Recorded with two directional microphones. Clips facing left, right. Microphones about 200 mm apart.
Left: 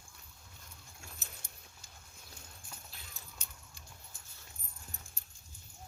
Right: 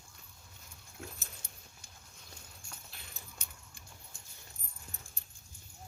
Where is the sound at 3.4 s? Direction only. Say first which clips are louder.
Right 1 dB; 60° right (ahead or behind).